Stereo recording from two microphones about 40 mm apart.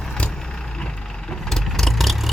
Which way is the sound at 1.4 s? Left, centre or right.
Centre.